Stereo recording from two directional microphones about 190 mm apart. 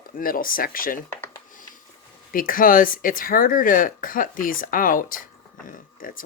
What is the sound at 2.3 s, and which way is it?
Speech, 45° left (ahead or behind).